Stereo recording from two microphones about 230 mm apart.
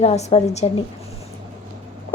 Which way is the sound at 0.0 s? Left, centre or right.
Left.